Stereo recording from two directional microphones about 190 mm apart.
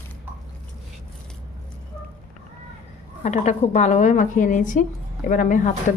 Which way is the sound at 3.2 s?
35° left (ahead or behind).